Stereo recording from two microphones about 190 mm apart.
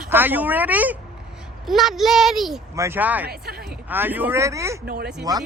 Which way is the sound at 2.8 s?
10° right (ahead or behind).